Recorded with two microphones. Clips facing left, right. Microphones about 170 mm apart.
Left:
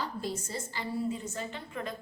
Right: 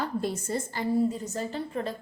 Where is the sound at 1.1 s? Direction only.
35° right (ahead or behind).